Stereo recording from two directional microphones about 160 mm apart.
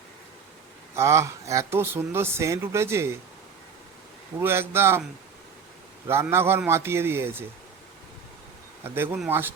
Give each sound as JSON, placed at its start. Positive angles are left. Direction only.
{"t": 0.9, "sound": "speech", "side_deg": -15}
{"t": 4.4, "sound": "speech", "side_deg": -15}
{"t": 6.1, "sound": "speech", "side_deg": -15}
{"t": 9.3, "sound": "speech", "side_deg": -15}